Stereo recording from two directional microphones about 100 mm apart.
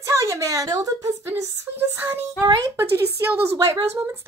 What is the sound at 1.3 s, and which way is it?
Speech, 25° right (ahead or behind).